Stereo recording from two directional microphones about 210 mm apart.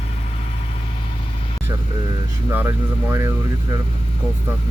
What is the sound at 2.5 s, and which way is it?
Speech, 10° right (ahead or behind).